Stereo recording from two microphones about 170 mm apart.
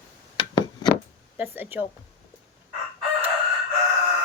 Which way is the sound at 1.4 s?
10° right (ahead or behind).